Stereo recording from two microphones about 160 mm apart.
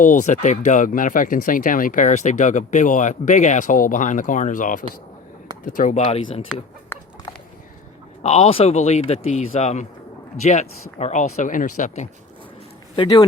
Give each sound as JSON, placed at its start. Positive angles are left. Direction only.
{"t": 0.0, "sound": "speech", "side_deg": 50}
{"t": 6.0, "sound": "a man's voice", "side_deg": 35}
{"t": 6.9, "sound": "chicken", "side_deg": 15}
{"t": 8.2, "sound": "a man's voice", "side_deg": 40}
{"t": 13.0, "sound": "speech", "side_deg": 30}